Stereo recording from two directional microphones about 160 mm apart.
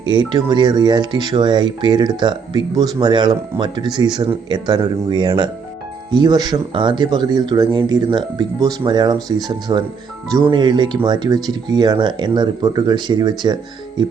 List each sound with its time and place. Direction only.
0.1 s speech: 30° right (ahead or behind)